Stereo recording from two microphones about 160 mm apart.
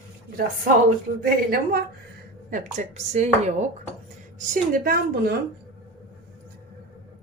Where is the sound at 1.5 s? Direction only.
70° right (ahead or behind).